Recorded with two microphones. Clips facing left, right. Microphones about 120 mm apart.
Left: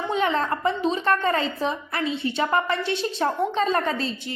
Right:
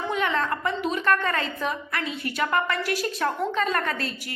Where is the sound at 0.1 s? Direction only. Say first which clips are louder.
Left 3 dB; 30° left (ahead or behind).